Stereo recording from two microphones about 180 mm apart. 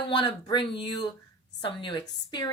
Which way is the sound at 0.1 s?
25° left (ahead or behind).